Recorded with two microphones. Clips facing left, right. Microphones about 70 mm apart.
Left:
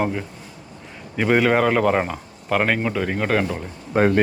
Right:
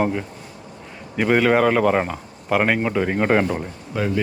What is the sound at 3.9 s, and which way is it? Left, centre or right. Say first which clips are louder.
Speech: left 6 dB; left.